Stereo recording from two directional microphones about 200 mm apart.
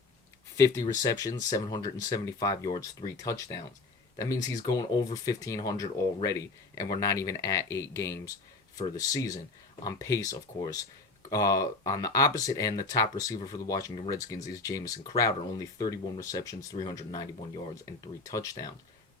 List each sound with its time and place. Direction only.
0.5 s speech: 15° left (ahead or behind)